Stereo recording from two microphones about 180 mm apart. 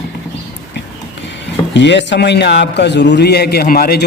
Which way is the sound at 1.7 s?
80° left.